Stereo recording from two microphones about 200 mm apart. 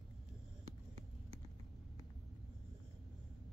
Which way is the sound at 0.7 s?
30° right (ahead or behind).